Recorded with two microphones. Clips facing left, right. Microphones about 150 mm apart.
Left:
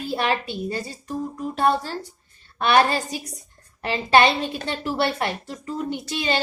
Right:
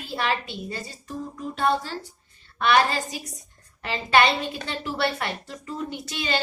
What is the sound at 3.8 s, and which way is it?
A woman's voice, 35° left (ahead or behind).